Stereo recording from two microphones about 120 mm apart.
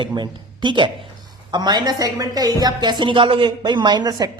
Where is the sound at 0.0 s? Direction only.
40° right (ahead or behind).